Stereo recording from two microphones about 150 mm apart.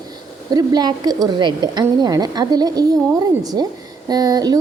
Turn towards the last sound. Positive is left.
turn(degrees=-25)  # may be behind; listen again after turning